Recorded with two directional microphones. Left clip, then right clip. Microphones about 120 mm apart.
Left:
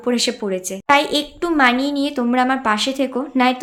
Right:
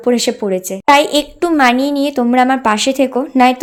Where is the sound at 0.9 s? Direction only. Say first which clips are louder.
Right 6 dB; 60° right (ahead or behind).